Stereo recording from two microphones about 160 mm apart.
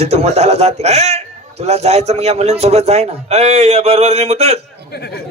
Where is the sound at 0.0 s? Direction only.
40° right (ahead or behind).